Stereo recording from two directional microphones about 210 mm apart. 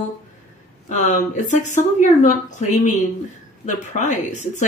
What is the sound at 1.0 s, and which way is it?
Speech, 40° left (ahead or behind).